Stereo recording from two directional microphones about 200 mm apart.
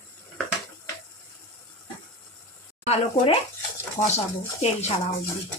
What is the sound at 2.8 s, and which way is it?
Speech, 30° left (ahead or behind).